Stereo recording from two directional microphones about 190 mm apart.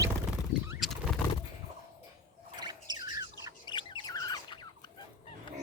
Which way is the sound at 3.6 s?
25° left (ahead or behind).